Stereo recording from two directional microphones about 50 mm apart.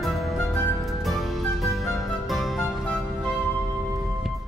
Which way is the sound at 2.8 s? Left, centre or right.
Centre.